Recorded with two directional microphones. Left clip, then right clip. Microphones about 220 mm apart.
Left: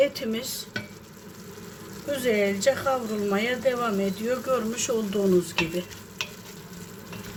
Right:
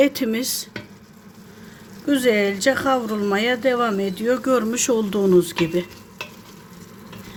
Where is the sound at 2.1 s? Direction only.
50° right (ahead or behind).